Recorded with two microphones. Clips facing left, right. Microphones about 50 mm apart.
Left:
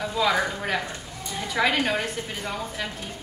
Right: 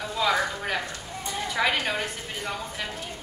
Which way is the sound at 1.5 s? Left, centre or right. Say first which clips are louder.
Left 3 dB; centre.